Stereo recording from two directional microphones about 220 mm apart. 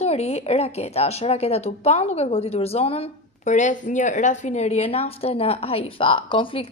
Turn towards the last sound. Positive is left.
turn(degrees=25)  # may be behind; listen again after turning